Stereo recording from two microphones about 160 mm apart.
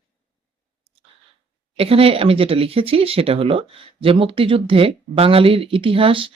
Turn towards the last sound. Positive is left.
turn(degrees=-35)  # may be behind; listen again after turning